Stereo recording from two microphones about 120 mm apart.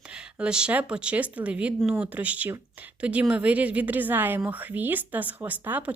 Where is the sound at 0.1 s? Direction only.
10° right (ahead or behind).